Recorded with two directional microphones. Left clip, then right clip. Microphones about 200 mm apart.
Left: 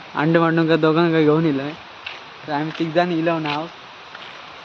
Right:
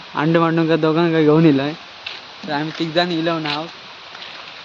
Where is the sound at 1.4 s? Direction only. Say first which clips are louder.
Right 6 dB; 55° right (ahead or behind).